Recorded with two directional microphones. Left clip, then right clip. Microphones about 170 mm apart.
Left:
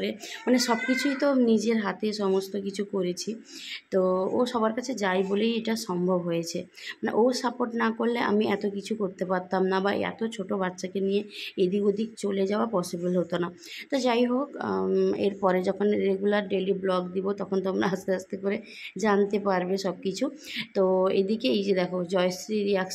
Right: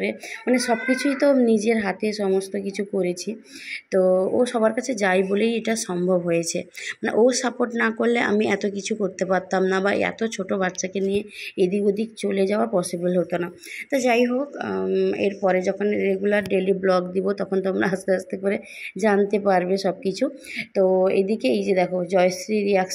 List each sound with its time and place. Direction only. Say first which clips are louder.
0.0 s speech: right 4 dB; 5° right (ahead or behind)
16.4 s speech: right 6 dB; 15° right (ahead or behind)